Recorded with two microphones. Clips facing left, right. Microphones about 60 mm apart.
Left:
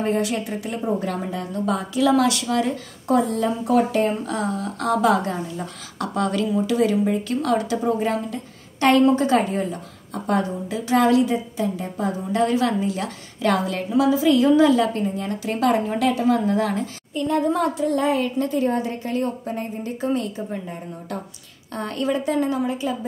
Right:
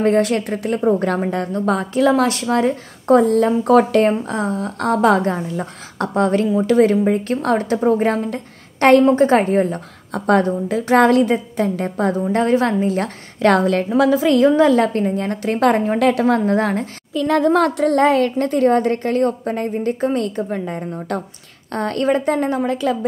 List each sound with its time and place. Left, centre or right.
0.0 s a woman's voice: right
4.3 s a woman's voice: right
6.1 s a woman's voice: right
17.1 s a child's voice: right
22.7 s a woman's voice: right